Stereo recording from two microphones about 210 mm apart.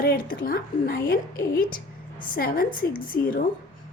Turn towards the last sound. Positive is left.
turn(degrees=45)  # may be behind; listen again after turning